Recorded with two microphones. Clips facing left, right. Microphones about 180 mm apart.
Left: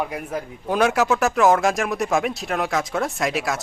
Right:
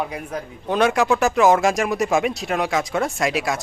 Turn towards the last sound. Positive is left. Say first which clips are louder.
# right 2 dB
turn(degrees=0)  # may be behind; listen again after turning